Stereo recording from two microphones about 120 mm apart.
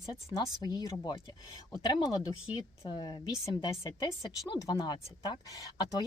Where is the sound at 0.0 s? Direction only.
30° left (ahead or behind).